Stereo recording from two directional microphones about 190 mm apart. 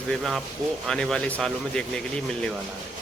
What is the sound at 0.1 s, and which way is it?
Speech, centre (ahead or behind).